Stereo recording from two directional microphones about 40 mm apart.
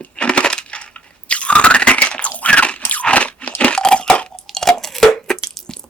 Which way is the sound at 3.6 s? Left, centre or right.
Centre.